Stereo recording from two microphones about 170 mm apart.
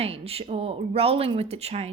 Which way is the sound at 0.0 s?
35° right (ahead or behind).